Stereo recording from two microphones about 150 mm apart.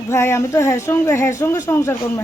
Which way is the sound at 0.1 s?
15° left (ahead or behind).